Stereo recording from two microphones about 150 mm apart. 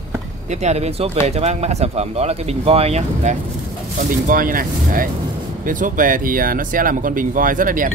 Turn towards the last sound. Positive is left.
turn(degrees=-65)  # may be behind; listen again after turning